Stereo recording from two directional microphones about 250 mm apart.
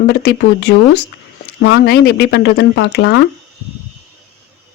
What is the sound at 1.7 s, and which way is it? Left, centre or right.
Speech, left.